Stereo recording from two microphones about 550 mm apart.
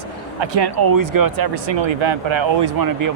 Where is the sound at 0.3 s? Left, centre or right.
Right.